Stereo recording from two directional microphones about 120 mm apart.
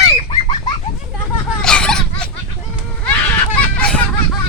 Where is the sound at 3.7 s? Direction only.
10° left (ahead or behind).